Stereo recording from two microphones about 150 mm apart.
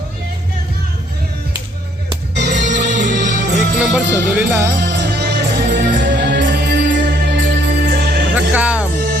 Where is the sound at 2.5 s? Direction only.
55° right (ahead or behind).